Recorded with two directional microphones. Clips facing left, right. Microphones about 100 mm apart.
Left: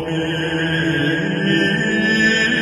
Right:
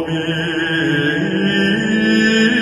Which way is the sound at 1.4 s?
50° right (ahead or behind).